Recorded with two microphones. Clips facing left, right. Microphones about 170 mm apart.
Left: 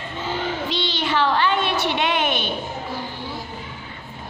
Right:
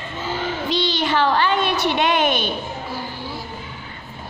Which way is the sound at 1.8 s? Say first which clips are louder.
Right 3 dB; 40° right (ahead or behind).